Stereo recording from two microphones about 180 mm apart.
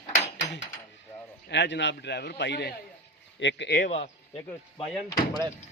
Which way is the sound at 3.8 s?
35° left (ahead or behind).